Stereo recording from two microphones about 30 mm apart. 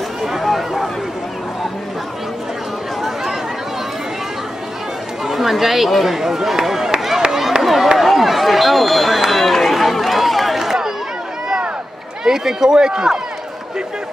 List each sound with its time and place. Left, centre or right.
0.4 s a sound: centre
5.2 s chatter: centre
5.9 s speech: centre
7.2 s a sound: centre
9.3 s run: centre
10.6 s chatter: centre
12.3 s a man's voice: centre